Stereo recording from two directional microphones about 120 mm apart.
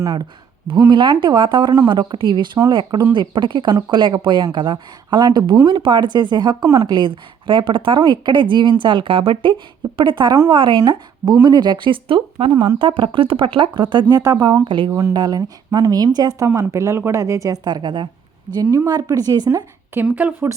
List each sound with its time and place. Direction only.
0.0 s speech: 30° right (ahead or behind)
14.8 s a woman's voice: 20° right (ahead or behind)
15.1 s a woman's voice: 35° right (ahead or behind)
18.5 s a woman's voice: 30° right (ahead or behind)
20.0 s speech: 10° right (ahead or behind)